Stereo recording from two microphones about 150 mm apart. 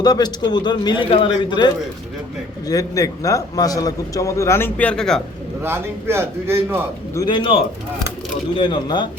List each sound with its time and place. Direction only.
0.0 s a man's voice: 25° left (ahead or behind); by 5.2 s 5° left (ahead or behind)
5.6 s a man's voice: 15° right (ahead or behind)
7.3 s speech: 35° left (ahead or behind)